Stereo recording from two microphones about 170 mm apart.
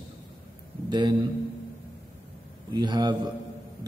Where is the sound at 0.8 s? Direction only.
25° right (ahead or behind).